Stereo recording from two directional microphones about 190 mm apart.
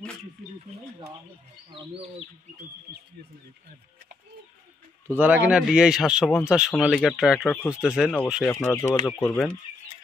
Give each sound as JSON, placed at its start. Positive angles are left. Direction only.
{"t": 1.7, "sound": "speech", "side_deg": -30}
{"t": 5.2, "sound": "speech", "side_deg": -10}
{"t": 8.5, "sound": "speech", "side_deg": 15}